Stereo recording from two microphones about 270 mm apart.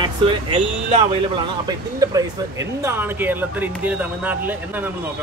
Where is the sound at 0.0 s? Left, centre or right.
Centre.